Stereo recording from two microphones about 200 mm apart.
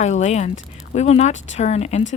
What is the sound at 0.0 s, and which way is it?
Speech, 35° left (ahead or behind).